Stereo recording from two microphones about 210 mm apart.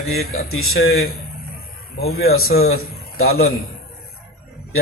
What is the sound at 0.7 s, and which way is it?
Speech, 45° left (ahead or behind).